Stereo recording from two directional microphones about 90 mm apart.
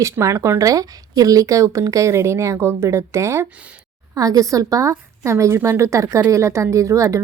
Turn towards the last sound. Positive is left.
turn(degrees=-35)  # may be behind; listen again after turning